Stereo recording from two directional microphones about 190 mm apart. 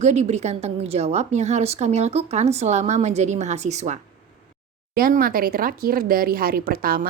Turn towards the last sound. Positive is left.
turn(degrees=-50)  # may be behind; listen again after turning